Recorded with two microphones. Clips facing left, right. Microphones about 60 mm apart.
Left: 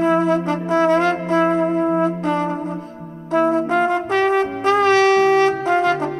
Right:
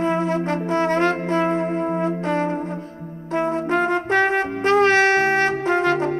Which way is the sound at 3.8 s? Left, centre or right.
Right.